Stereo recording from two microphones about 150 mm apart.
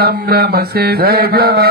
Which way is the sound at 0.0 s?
90° right.